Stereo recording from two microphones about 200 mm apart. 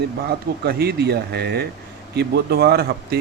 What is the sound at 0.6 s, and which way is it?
Speech, 50° right (ahead or behind).